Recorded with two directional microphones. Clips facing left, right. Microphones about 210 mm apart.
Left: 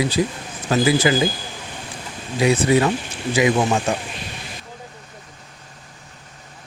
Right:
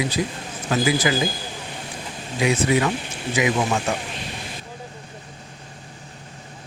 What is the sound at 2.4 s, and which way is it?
Speech, 35° left (ahead or behind).